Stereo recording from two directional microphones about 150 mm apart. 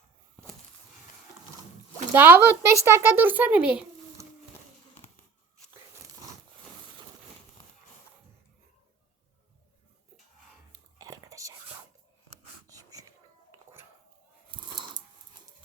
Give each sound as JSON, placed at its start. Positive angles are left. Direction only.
{"t": 2.1, "sound": "a woman's voice", "side_deg": -15}
{"t": 10.9, "sound": "whispering", "side_deg": -20}
{"t": 12.6, "sound": "wheeze", "side_deg": -25}